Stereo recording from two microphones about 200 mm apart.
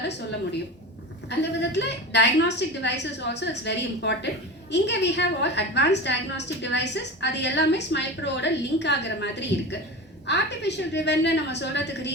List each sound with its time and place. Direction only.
1.4 s a woman's voice: 60° left (ahead or behind)